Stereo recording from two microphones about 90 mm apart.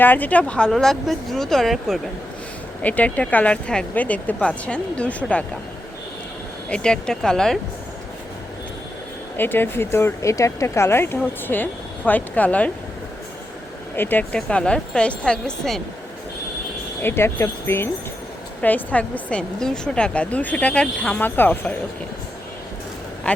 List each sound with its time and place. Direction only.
0.0 s speech: 20° left (ahead or behind); by 2.0 s centre (ahead or behind)
2.8 s speech: 15° left (ahead or behind)
6.7 s speech: 10° left (ahead or behind)
9.4 s speech: 25° left (ahead or behind)
13.9 s speech: 20° left (ahead or behind)
14.3 s speech: 10° left (ahead or behind)
17.0 s speech: 25° left (ahead or behind)
18.6 s speech: 20° left (ahead or behind)
23.3 s speech: 10° left (ahead or behind)